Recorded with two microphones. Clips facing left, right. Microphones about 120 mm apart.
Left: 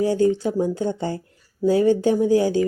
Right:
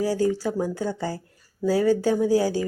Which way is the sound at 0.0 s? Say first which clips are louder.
Left 4 dB; 25° left (ahead or behind).